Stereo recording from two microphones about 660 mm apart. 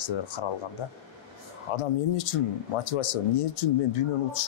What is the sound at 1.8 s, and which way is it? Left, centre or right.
Speech, left.